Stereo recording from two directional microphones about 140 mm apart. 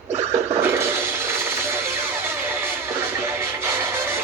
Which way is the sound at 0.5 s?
15° right (ahead or behind).